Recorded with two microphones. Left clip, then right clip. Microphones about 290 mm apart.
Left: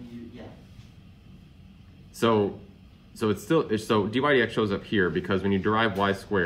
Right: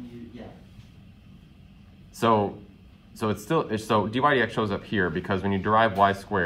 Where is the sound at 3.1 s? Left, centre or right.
Right.